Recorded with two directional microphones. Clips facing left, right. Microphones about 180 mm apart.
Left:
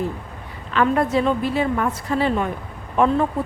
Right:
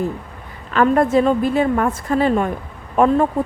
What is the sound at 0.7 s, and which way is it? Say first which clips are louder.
A woman's voice: right 4 dB; 45° right (ahead or behind).